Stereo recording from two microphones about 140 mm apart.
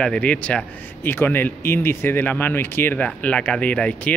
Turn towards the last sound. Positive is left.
turn(degrees=10)  # may be behind; listen again after turning